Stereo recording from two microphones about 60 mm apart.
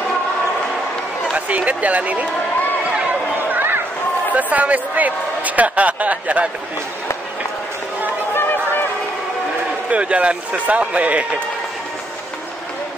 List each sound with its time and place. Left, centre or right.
1.3 s speech: right
3.5 s a sound: right
4.3 s a man's voice: right
8.4 s chatter: left
9.8 s a man's voice: right